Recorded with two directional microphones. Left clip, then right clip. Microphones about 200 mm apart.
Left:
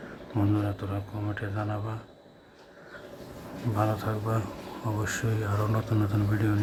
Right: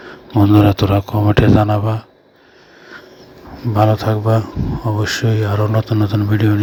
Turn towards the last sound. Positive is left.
turn(degrees=-30)  # may be behind; listen again after turning